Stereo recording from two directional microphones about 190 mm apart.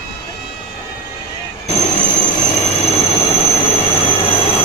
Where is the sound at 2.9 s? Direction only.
30° left (ahead or behind).